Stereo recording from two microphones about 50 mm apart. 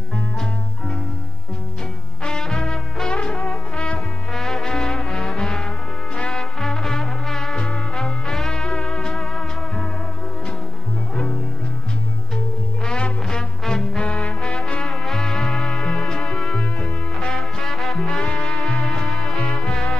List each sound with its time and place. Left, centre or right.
2.2 s music: centre
4.3 s music: centre
6.6 s music: centre
12.8 s music: centre
14.0 s music: left